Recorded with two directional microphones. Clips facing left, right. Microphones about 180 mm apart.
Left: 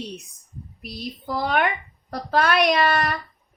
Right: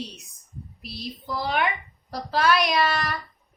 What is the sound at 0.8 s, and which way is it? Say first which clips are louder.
Child singing: left 3 dB; 55° left (ahead or behind).